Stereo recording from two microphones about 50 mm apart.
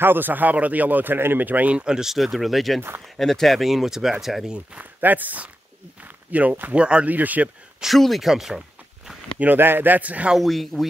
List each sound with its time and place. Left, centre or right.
0.0 s speech: right
1.9 s speech: centre
2.1 s speech: centre
4.7 s speech: right
6.7 s speech: right
7.1 s speech: right
7.8 s speech: centre
9.6 s speech: right
10.3 s speech: centre